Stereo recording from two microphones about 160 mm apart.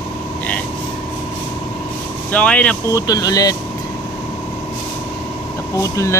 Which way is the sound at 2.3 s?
10° left (ahead or behind).